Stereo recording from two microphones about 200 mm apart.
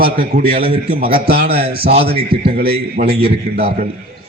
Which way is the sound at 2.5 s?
50° right (ahead or behind).